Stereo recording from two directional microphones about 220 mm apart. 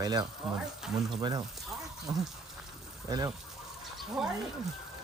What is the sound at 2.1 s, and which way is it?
Speech, 15° right (ahead or behind).